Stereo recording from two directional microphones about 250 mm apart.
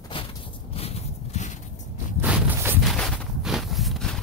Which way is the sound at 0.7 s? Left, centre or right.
Left.